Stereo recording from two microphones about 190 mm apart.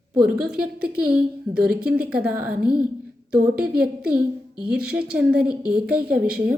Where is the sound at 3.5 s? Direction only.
55° right (ahead or behind).